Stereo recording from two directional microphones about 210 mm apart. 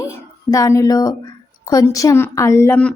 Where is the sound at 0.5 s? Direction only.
15° left (ahead or behind).